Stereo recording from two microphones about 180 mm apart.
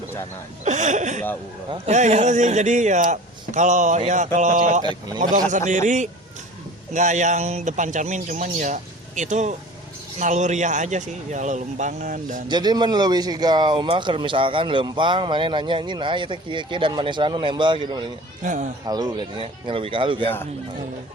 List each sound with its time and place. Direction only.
0.6 s a man's voice: 40° right (ahead or behind)
4.8 s speech: 25° right (ahead or behind)
5.2 s a man's voice: 45° right (ahead or behind)
12.5 s speech: 25° right (ahead or behind)
18.4 s a man's voice: 45° right (ahead or behind)
18.9 s speech: 20° right (ahead or behind)